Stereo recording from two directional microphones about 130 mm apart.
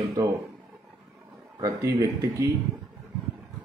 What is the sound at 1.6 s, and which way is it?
Speech, 25° right (ahead or behind).